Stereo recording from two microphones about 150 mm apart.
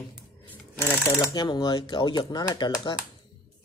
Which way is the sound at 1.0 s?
25° left (ahead or behind).